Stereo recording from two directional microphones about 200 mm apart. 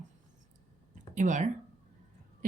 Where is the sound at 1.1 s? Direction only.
40° right (ahead or behind).